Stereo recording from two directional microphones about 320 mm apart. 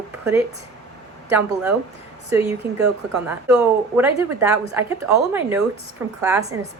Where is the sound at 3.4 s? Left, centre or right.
Centre.